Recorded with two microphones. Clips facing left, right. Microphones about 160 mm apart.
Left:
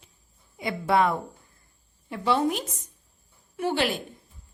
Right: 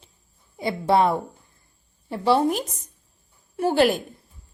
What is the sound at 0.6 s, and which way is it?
A woman's voice, 30° right (ahead or behind).